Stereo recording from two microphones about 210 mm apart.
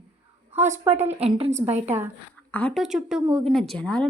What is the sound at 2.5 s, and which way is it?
A woman's voice, 5° left (ahead or behind).